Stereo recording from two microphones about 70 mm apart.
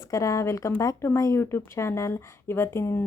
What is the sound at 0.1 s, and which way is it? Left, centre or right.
Speech, left.